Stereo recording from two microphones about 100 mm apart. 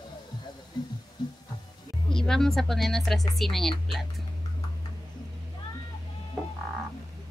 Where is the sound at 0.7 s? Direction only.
45° left (ahead or behind).